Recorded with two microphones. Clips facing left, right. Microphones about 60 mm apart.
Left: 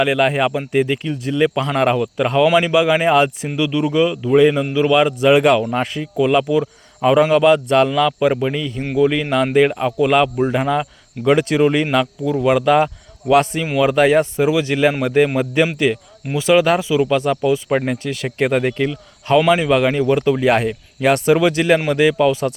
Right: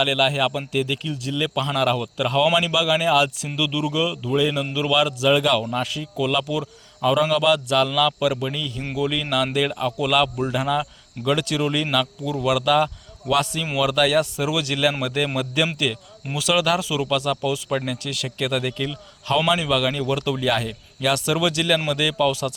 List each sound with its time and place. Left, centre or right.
0.0 s speech: left
4.6 s speech: left
5.7 s speech: left
11.3 s speech: left
12.2 s speech: left
12.5 s speech: left